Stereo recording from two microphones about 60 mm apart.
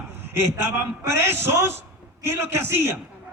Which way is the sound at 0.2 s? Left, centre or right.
Right.